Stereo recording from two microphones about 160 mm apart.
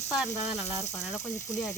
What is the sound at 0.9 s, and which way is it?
Speech, 10° left (ahead or behind).